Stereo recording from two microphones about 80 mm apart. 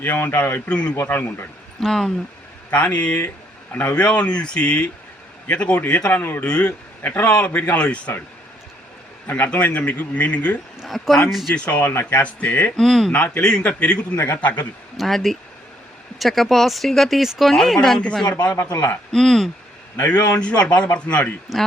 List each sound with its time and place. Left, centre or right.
0.0 s a man's voice: left
0.7 s speech: centre
1.0 s a man's voice: left
1.8 s speech: centre
2.6 s a man's voice: centre
9.3 s a man's voice: centre
10.8 s speech: centre
11.5 s a man's voice: centre
12.7 s speech: centre
13.1 s a man's voice: centre
14.9 s speech: centre
20.6 s speech: centre